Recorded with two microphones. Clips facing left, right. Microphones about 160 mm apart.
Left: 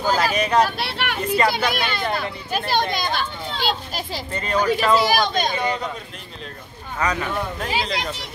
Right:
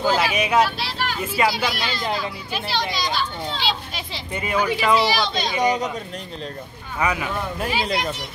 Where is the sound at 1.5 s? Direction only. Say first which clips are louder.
Left 2 dB; 55° left (ahead or behind).